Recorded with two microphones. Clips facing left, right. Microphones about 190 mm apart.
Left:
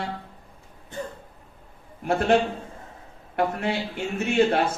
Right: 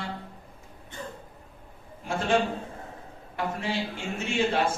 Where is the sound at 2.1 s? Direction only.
60° left (ahead or behind).